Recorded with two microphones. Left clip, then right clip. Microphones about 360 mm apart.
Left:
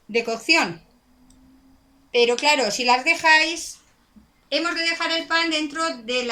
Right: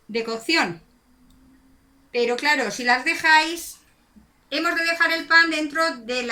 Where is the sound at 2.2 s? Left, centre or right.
Centre.